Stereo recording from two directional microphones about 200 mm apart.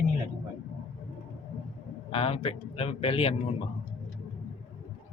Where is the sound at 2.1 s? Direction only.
30° left (ahead or behind).